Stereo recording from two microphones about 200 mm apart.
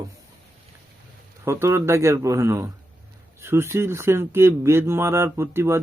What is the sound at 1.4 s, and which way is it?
Speech, 15° right (ahead or behind).